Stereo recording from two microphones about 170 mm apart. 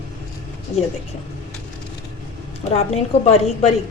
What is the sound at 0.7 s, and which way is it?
Speech, 40° left (ahead or behind).